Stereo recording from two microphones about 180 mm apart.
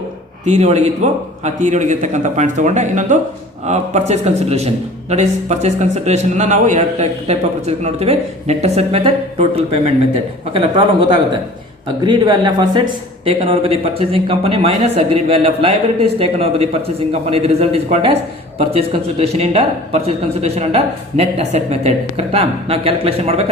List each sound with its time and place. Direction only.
0.4 s a man's voice: 40° right (ahead or behind)
19.2 s a man's voice: 35° right (ahead or behind)